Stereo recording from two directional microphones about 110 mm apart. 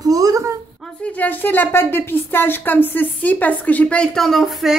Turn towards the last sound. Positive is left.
turn(degrees=0)  # may be behind; listen again after turning